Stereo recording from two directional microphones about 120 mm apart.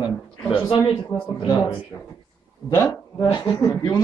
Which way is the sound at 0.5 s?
45° left (ahead or behind).